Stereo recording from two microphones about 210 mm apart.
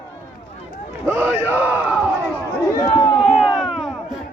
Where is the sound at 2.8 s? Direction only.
20° left (ahead or behind).